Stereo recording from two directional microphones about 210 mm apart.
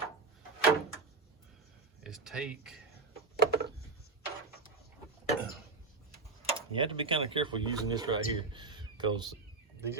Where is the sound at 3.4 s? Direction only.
50° right (ahead or behind).